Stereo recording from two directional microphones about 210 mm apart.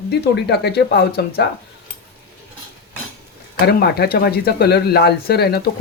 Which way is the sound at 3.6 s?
50° left (ahead or behind).